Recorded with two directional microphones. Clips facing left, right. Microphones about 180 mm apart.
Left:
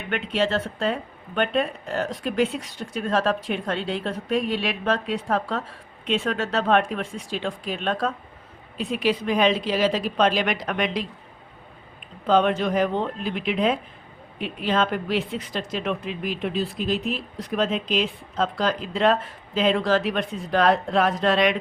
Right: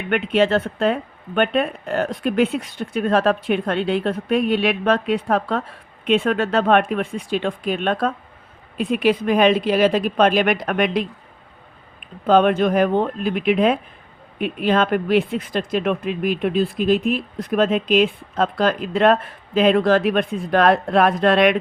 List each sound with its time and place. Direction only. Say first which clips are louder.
0.1 s speech: right 6 dB; 60° right (ahead or behind)
12.2 s speech: right 5 dB; 55° right (ahead or behind)